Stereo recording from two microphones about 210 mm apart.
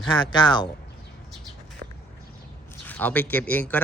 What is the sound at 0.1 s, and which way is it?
Speech, 20° left (ahead or behind).